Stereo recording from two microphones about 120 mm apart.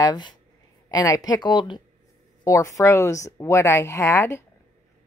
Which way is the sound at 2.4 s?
25° left (ahead or behind).